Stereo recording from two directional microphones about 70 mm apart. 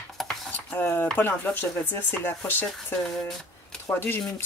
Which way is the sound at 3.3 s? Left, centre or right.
Centre.